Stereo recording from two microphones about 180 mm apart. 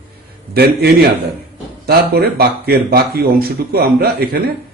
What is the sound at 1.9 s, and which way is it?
Speech, 60° right (ahead or behind).